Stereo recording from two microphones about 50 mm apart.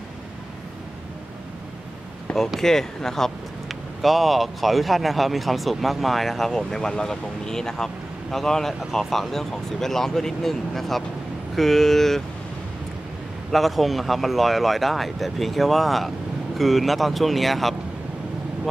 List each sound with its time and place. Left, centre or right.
2.3 s speech: centre
4.0 s speech: centre
13.5 s speech: centre